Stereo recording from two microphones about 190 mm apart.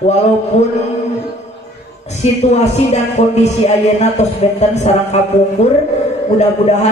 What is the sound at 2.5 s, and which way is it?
Speech, 35° left (ahead or behind).